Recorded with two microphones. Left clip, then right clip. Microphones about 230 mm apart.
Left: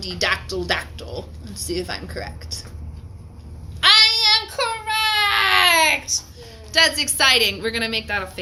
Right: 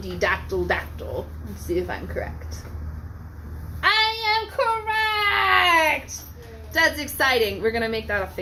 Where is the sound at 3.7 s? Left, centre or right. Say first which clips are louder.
Left 6 dB; left.